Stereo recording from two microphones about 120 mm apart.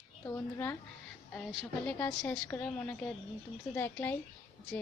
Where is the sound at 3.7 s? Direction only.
20° left (ahead or behind).